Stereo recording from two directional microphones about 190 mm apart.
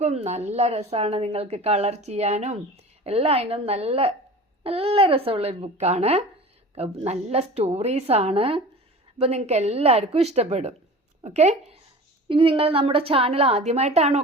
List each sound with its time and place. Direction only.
0.0 s a woman's voice: 35° right (ahead or behind)